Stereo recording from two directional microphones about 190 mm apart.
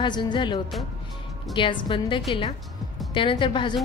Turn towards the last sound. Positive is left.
turn(degrees=25)  # may be behind; listen again after turning